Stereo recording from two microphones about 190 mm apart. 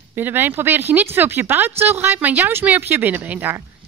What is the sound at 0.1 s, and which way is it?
Speech, 10° right (ahead or behind).